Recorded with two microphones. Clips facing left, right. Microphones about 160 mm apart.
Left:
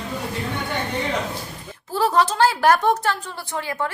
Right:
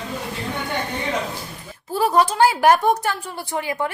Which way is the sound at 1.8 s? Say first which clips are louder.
Right 1 dB; 10° right (ahead or behind).